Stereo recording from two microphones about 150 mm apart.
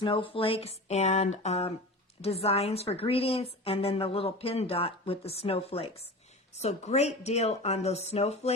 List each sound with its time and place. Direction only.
0.0 s a woman's voice: 35° left (ahead or behind)